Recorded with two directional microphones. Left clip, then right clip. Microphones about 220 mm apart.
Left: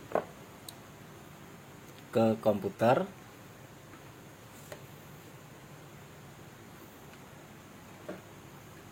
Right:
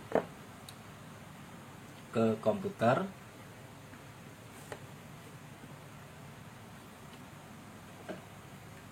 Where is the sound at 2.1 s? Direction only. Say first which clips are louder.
Left 3 dB; 40° left (ahead or behind).